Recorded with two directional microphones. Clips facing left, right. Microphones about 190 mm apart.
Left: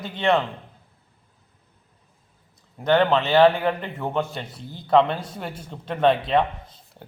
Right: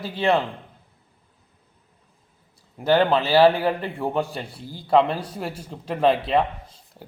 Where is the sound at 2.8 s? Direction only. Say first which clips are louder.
Even; 5° right (ahead or behind).